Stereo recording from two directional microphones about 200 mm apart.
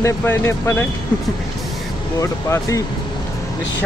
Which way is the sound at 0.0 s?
15° left (ahead or behind).